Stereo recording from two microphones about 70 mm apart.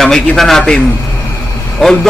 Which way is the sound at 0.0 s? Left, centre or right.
Centre.